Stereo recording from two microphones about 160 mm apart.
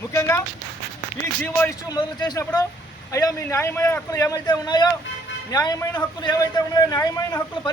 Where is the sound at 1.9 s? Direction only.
25° left (ahead or behind).